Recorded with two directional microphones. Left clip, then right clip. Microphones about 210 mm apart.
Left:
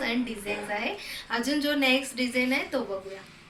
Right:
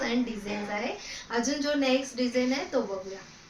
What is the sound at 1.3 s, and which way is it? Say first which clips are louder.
A woman's voice: left 1 dB; 10° right (ahead or behind).